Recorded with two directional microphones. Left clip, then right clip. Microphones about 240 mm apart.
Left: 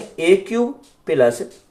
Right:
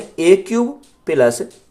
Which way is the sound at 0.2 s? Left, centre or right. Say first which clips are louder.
Right 3 dB; right.